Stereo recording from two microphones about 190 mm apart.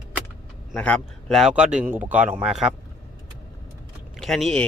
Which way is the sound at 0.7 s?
5° left (ahead or behind).